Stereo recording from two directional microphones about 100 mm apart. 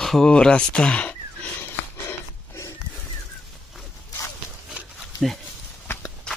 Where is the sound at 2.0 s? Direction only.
30° left (ahead or behind).